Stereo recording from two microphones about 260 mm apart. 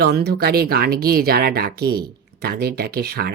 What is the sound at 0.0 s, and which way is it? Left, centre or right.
Speech, right.